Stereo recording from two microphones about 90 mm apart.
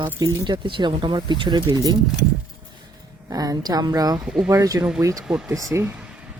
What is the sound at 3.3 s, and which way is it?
Speech, 45° right (ahead or behind).